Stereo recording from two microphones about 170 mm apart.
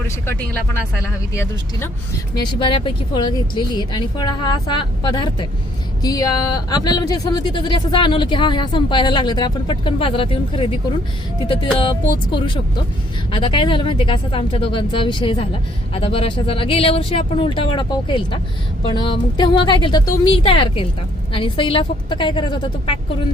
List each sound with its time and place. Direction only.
0.3 s speech: 15° left (ahead or behind)
13.3 s speech: 30° left (ahead or behind)